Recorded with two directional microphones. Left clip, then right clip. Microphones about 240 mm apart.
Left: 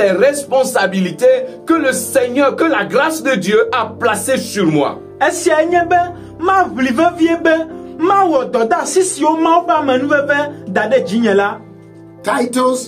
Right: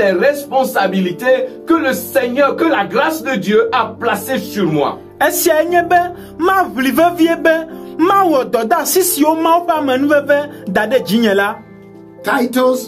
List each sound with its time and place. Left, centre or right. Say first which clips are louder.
0.1 s speech: left 1 dB; left
5.2 s speech: even; right
12.3 s speech: right 1 dB; centre